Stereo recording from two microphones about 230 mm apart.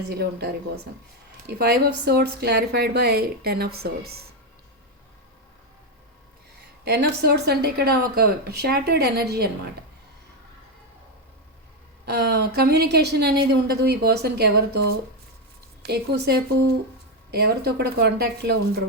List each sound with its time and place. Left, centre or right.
0.1 s a woman's voice: right
6.8 s a woman's voice: right
12.0 s a woman's voice: right